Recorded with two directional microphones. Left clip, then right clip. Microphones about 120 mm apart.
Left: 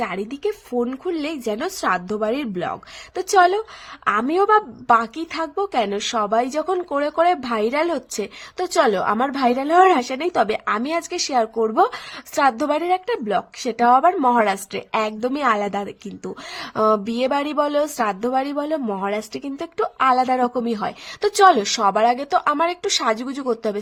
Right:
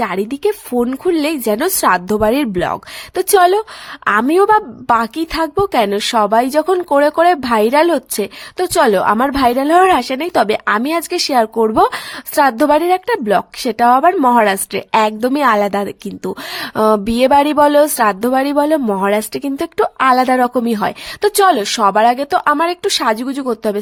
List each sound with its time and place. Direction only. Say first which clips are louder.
0.0 s a woman's voice: right 8 dB; 55° right (ahead or behind)
21.2 s speech: right 2 dB; 45° right (ahead or behind)